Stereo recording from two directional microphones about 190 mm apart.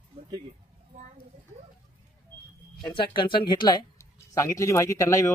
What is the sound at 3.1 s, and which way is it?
Speech, 25° left (ahead or behind).